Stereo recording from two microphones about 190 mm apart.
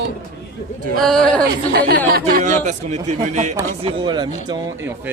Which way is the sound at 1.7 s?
55° right (ahead or behind).